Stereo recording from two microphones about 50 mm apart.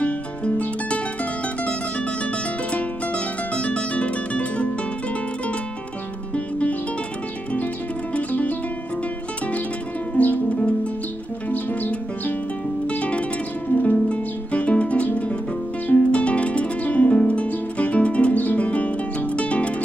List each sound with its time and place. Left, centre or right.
0.0 s music: left
2.7 s harp: left
6.3 s music: left
10.1 s music: left